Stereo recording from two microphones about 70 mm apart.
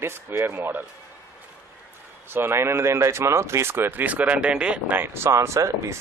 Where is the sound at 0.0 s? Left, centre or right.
Right.